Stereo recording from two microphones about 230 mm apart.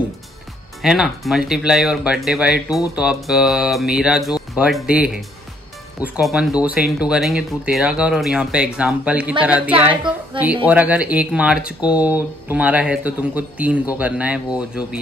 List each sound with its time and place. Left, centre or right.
0.8 s speech: centre